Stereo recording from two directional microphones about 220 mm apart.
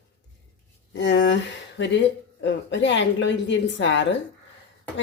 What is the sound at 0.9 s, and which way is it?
Speech, 55° left (ahead or behind).